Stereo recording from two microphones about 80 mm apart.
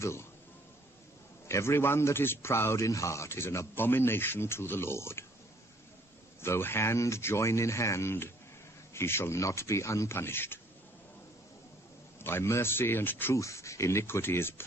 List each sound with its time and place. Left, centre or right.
0.0 s speech: left
1.5 s a man's voice: left
6.4 s a man's voice: left
12.2 s speech: left
13.4 s a man's voice: left